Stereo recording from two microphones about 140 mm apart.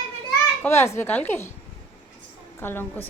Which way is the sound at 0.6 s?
15° left (ahead or behind).